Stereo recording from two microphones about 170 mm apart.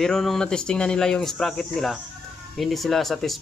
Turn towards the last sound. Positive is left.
turn(degrees=0)  # may be behind; listen again after turning